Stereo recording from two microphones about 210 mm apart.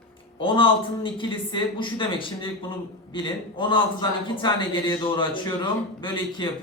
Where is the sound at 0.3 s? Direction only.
25° left (ahead or behind).